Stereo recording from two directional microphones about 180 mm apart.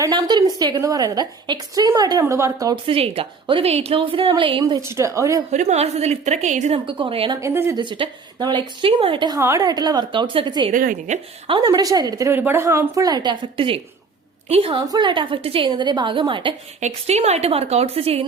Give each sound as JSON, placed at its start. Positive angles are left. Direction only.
{"t": 0.0, "sound": "a woman's voice", "side_deg": -25}
{"t": 2.8, "sound": "a woman's voice", "side_deg": -30}
{"t": 5.5, "sound": "a woman's voice", "side_deg": -40}
{"t": 7.4, "sound": "a woman's voice", "side_deg": -15}
{"t": 7.8, "sound": "a woman's voice", "side_deg": -25}
{"t": 10.7, "sound": "a woman's voice", "side_deg": -50}
{"t": 14.8, "sound": "a woman's voice", "side_deg": -20}